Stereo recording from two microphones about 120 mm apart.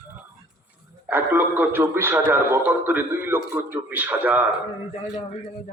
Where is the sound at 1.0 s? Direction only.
15° right (ahead or behind).